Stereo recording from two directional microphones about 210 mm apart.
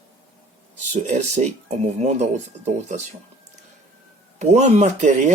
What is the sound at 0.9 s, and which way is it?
Speech, 35° right (ahead or behind).